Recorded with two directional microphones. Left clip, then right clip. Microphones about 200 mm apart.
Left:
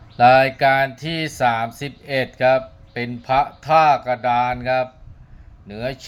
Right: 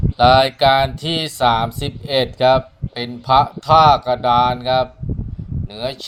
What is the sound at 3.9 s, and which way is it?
Speech, 15° right (ahead or behind).